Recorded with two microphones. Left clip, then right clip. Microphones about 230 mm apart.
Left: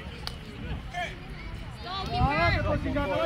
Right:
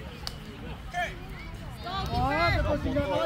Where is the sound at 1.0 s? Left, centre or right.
Right.